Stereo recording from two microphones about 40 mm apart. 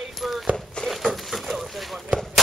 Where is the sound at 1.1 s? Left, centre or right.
Centre.